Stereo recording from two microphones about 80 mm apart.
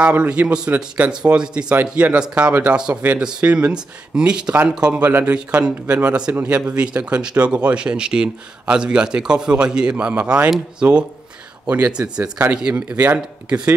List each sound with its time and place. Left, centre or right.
0.0 s a man's voice: centre